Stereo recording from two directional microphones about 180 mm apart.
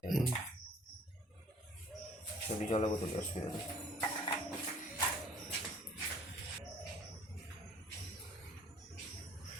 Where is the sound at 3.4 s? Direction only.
40° left (ahead or behind).